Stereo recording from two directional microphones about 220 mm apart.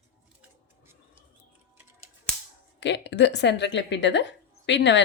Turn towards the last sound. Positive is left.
turn(degrees=55)  # may be behind; listen again after turning